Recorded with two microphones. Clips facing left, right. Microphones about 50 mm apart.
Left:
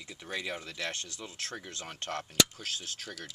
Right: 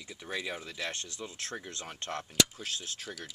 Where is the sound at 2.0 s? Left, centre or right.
Right.